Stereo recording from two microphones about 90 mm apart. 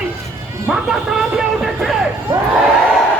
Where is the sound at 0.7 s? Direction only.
5° right (ahead or behind).